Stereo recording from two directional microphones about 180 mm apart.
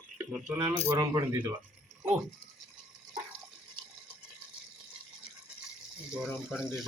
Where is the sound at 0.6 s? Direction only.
15° right (ahead or behind).